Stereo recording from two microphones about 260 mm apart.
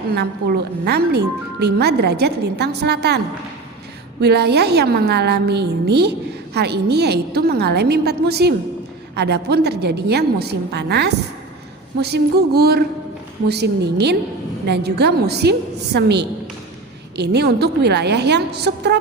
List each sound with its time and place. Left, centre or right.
0.1 s a woman's voice: right
4.2 s a woman's voice: right